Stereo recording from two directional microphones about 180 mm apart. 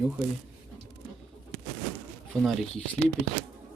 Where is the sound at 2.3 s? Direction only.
Centre (ahead or behind).